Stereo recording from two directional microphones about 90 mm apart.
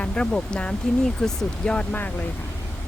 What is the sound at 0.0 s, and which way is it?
Speech, 10° left (ahead or behind).